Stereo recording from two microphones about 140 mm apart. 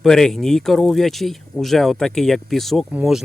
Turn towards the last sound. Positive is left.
turn(degrees=-5)  # may be behind; listen again after turning